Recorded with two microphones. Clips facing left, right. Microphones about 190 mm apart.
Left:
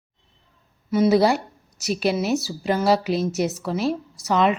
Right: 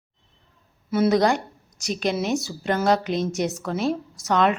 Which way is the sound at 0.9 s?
Centre (ahead or behind).